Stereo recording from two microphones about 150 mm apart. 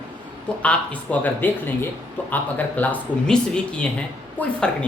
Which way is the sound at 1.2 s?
15° left (ahead or behind).